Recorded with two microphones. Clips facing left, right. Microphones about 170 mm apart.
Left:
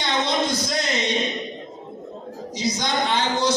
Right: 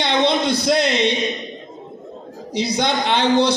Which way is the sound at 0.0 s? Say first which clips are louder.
Right 5 dB; 65° right (ahead or behind).